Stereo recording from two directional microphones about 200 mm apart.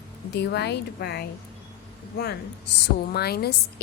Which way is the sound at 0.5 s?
55° left (ahead or behind).